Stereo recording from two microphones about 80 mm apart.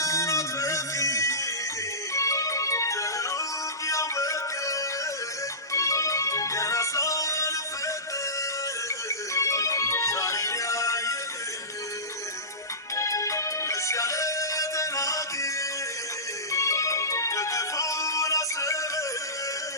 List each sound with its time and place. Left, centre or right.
0.0 s music: left
9.0 s music: left
13.0 s music: left
16.5 s music: left